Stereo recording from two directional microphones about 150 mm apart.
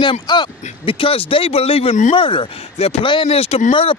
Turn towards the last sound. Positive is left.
turn(degrees=40)  # may be behind; listen again after turning